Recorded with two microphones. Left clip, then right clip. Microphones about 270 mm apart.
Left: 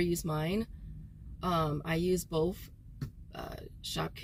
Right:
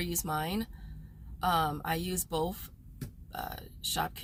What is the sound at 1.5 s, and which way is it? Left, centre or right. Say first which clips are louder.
Speech: right 2 dB; right.